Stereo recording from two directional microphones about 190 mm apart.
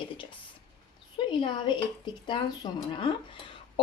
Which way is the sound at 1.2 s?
25° left (ahead or behind).